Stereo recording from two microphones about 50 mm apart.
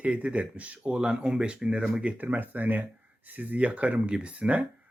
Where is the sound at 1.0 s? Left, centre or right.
Centre.